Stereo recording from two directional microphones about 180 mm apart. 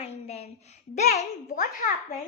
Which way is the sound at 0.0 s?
35° left (ahead or behind).